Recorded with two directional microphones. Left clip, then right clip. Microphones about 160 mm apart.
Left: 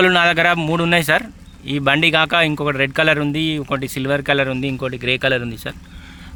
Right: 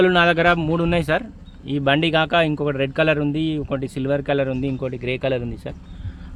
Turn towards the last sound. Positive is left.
turn(degrees=0)  # may be behind; listen again after turning